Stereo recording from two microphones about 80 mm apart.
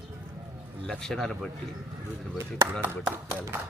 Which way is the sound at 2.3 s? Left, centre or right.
Right.